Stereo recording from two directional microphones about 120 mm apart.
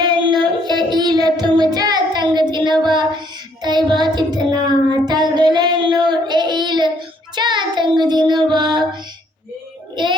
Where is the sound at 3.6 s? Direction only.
35° right (ahead or behind).